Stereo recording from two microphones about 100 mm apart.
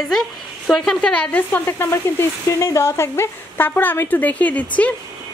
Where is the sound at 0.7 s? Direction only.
5° left (ahead or behind).